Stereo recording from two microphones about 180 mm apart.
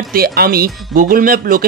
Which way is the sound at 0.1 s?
60° right (ahead or behind).